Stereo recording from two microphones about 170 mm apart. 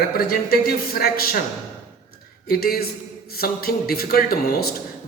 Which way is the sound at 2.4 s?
60° left (ahead or behind).